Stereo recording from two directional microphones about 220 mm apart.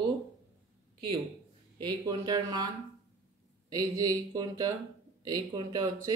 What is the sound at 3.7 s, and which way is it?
Speech, 15° right (ahead or behind).